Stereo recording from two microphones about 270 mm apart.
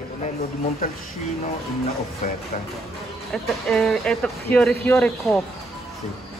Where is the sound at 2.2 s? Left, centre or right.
Left.